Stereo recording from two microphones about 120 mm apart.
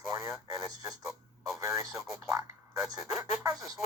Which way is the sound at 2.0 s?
Centre (ahead or behind).